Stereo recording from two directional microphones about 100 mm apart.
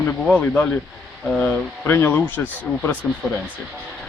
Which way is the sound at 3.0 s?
10° left (ahead or behind).